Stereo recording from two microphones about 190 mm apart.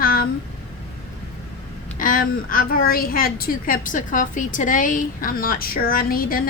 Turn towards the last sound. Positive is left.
turn(degrees=50)  # may be behind; listen again after turning